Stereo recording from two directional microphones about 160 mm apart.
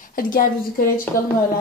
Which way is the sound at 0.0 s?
60° left (ahead or behind).